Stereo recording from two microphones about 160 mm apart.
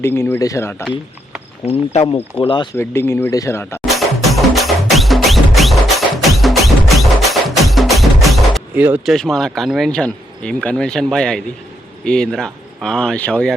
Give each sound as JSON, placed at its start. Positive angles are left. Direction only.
{"t": 0.0, "sound": "speech", "side_deg": 15}
{"t": 1.6, "sound": "speech", "side_deg": 40}
{"t": 2.7, "sound": "speech", "side_deg": 15}
{"t": 3.8, "sound": "music", "side_deg": 0}
{"t": 8.7, "sound": "speech", "side_deg": -10}
{"t": 9.1, "sound": "speech", "side_deg": 5}